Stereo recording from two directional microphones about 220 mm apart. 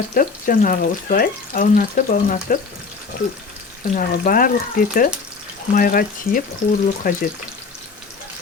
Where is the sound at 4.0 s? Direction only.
40° left (ahead or behind).